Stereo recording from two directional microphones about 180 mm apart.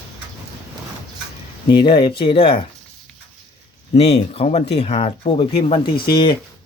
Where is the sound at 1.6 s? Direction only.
25° left (ahead or behind).